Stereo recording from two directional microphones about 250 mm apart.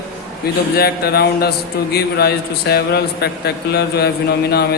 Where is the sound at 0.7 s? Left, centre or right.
Left.